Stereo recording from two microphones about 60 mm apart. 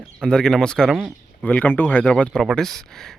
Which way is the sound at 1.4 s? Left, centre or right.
Left.